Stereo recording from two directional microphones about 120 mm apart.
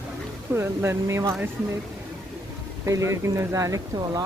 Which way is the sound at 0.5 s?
20° right (ahead or behind).